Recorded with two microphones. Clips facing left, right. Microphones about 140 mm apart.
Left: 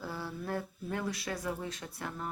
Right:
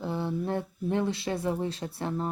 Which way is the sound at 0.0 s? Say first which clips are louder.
Right 8 dB; 25° right (ahead or behind).